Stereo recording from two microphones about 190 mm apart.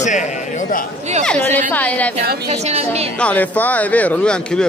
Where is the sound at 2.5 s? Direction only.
35° right (ahead or behind).